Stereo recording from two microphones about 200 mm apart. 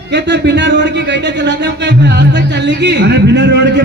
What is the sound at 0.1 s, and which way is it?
A man's voice, 60° right (ahead or behind).